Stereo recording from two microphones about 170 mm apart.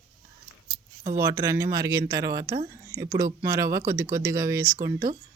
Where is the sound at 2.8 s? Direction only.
20° right (ahead or behind).